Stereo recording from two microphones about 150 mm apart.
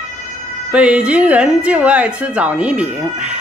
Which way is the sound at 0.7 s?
5° right (ahead or behind).